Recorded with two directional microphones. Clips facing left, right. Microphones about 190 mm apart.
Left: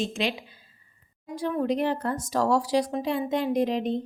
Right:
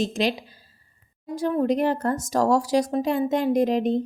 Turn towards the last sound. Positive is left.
turn(degrees=-45)  # may be behind; listen again after turning